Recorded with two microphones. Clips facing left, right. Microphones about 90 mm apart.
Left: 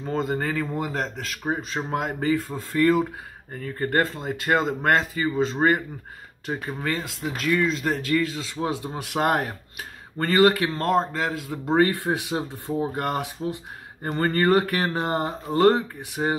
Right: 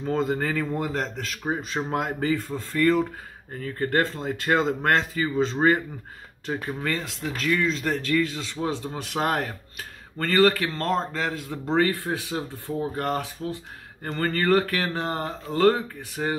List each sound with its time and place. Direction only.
0.0 s speech: centre (ahead or behind)
11.8 s speech: 20° left (ahead or behind)